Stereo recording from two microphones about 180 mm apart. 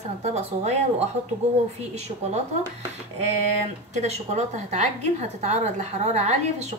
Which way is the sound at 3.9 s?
40° right (ahead or behind).